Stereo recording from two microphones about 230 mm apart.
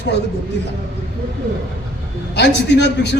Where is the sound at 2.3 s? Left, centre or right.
Left.